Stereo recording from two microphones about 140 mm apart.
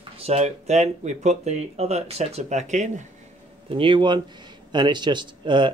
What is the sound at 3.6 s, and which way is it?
Speech, 40° right (ahead or behind).